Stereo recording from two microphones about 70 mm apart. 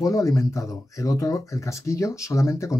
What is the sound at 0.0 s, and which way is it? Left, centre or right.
Speech, left.